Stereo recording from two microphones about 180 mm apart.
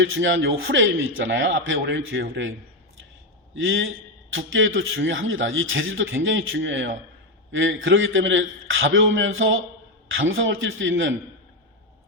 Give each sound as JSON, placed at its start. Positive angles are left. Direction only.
{"t": 0.0, "sound": "a man's voice", "side_deg": -90}
{"t": 3.5, "sound": "a man's voice", "side_deg": -90}